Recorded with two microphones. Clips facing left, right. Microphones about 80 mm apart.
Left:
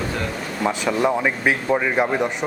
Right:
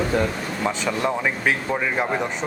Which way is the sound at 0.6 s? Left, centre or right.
Centre.